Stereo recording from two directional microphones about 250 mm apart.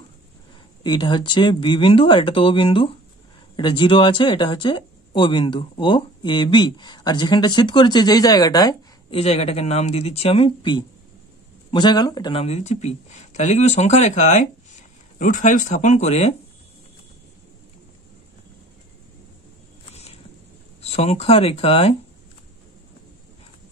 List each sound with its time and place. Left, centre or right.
0.8 s speech: centre
19.9 s a sound: left
20.8 s speech: left